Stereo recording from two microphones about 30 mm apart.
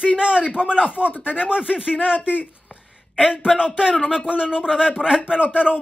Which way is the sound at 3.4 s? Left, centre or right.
Right.